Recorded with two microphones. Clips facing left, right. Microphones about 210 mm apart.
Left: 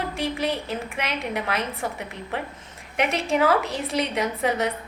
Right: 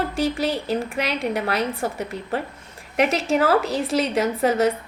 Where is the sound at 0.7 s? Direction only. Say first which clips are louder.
Right 5 dB; 35° right (ahead or behind).